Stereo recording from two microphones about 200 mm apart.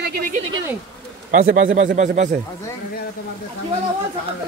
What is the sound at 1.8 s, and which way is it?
Speech, 35° right (ahead or behind).